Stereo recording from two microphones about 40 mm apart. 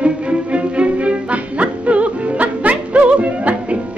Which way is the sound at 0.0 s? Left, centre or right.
Right.